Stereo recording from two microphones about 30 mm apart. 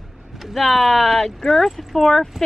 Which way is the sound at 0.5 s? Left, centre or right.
Centre.